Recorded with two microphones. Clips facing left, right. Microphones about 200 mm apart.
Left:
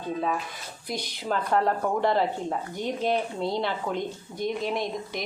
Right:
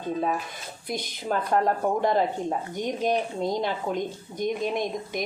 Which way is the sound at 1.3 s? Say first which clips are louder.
Right 1 dB; 45° right (ahead or behind).